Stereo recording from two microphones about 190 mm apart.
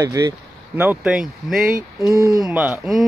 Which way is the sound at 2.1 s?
50° right (ahead or behind).